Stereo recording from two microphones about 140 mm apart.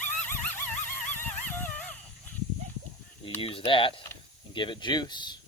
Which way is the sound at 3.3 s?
40° left (ahead or behind).